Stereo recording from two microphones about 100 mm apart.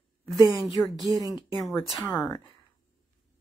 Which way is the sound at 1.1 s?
40° right (ahead or behind).